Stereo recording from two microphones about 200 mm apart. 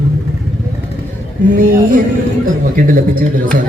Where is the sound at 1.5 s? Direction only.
45° right (ahead or behind).